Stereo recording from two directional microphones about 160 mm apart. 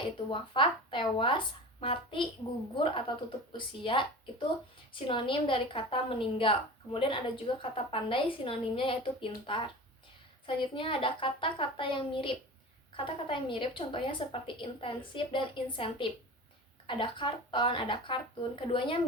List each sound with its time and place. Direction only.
0.3 s a woman's voice: 30° left (ahead or behind)
3.5 s a woman's voice: 30° left (ahead or behind)